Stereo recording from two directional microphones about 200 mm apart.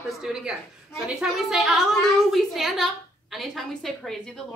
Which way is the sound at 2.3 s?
Centre (ahead or behind).